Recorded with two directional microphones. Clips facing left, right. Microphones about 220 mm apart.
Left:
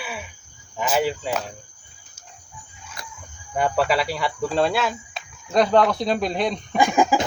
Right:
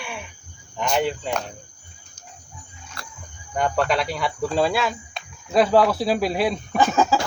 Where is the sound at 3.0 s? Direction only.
15° left (ahead or behind).